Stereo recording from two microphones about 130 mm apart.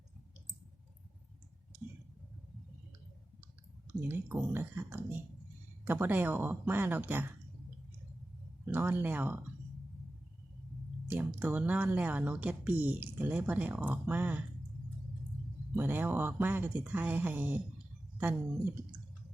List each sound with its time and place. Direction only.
4.1 s speech: 15° right (ahead or behind)
8.6 s speech: 15° right (ahead or behind)
11.1 s speech: 10° right (ahead or behind)
15.7 s speech: 15° right (ahead or behind)